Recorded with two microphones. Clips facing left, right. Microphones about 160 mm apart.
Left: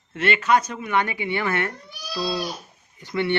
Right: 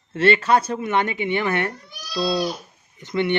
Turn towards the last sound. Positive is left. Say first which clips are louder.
# right 2 dB
turn(degrees=-20)  # may be behind; listen again after turning